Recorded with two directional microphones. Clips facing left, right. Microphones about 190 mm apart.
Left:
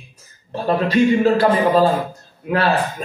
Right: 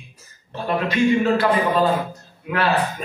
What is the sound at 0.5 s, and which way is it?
A man's voice, 35° left (ahead or behind).